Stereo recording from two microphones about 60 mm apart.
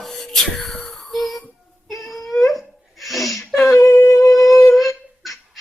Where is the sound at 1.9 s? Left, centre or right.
Centre.